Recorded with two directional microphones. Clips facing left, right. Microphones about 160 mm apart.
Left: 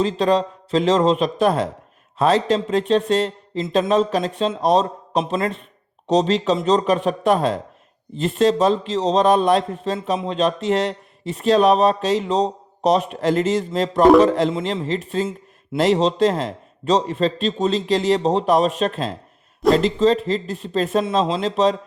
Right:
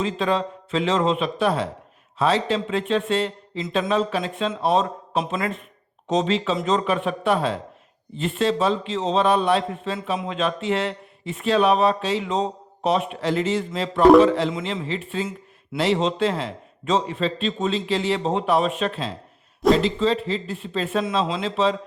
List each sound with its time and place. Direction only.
0.0 s speech: 40° left (ahead or behind)